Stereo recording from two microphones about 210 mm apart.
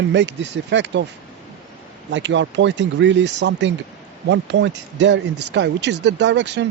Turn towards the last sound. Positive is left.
turn(degrees=-55)  # may be behind; listen again after turning